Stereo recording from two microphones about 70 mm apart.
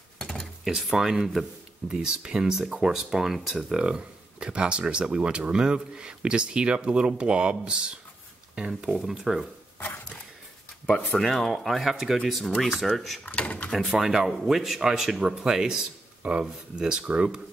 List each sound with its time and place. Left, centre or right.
0.2 s a sound: centre
0.7 s speech: centre
11.1 s speech: centre
13.2 s speech: left
13.7 s speech: centre